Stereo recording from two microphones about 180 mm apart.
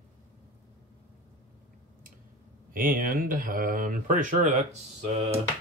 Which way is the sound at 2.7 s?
50° right (ahead or behind).